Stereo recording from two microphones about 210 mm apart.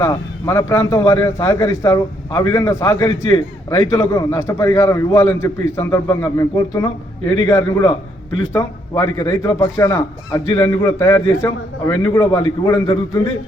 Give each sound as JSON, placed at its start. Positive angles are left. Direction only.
{"t": 0.0, "sound": "a man's voice", "side_deg": 15}